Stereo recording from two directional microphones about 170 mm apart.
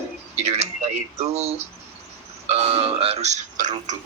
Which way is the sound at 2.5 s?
35° right (ahead or behind).